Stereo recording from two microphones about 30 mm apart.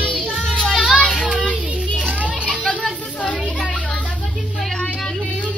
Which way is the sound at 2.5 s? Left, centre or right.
Left.